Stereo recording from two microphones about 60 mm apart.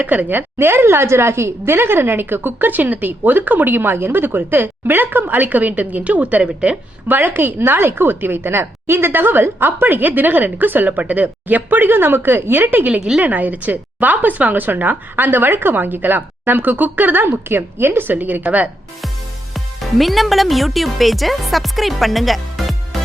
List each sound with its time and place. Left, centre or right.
0.0 s a woman's voice: right
7.1 s a woman's voice: right
12.9 s a woman's voice: right
19.5 s speech: centre